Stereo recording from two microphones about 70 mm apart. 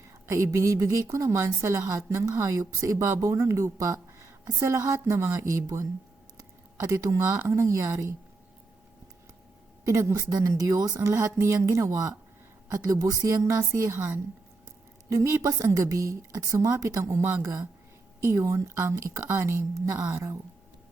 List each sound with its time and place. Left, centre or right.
0.3 s speech: right
10.0 s speech: right
10.3 s speech: right
11.9 s speech: right
12.6 s speech: right
15.1 s speech: right